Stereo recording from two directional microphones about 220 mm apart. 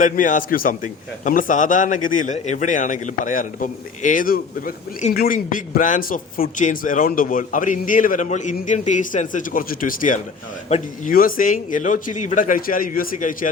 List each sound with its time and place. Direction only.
0.0 s a man's voice: 35° left (ahead or behind)